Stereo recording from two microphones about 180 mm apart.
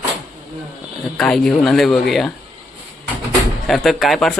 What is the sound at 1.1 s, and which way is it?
Speech, 5° left (ahead or behind).